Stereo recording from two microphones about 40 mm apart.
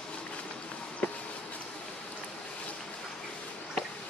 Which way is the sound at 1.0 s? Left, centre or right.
Left.